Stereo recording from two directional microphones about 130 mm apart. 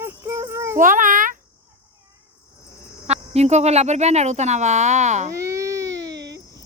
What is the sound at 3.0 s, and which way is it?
Speech, 55° right (ahead or behind).